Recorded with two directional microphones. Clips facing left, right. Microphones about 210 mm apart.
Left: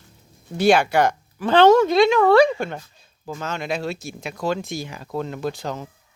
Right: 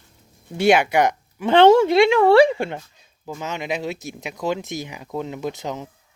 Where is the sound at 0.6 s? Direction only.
20° right (ahead or behind).